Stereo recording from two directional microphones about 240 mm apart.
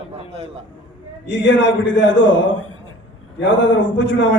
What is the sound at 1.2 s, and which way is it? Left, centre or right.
Speech, left.